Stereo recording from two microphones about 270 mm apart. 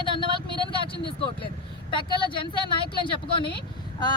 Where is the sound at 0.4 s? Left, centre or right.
Centre.